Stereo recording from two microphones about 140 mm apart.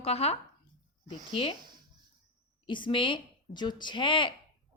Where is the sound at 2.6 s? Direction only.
35° left (ahead or behind).